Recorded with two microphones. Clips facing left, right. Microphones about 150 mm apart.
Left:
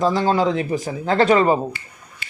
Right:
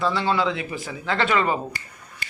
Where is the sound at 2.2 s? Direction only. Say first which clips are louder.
Right 1 dB; 45° right (ahead or behind).